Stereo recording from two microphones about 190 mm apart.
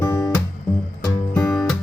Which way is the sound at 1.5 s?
Centre (ahead or behind).